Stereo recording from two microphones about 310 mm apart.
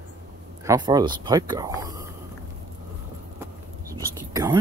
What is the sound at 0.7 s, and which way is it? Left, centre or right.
Speech, centre.